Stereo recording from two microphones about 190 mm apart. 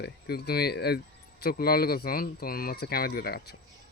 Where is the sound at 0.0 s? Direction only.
55° left (ahead or behind).